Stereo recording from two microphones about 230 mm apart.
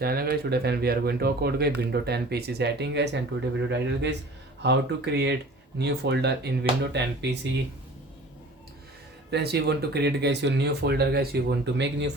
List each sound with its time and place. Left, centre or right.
0.0 s speech: right
9.3 s speech: right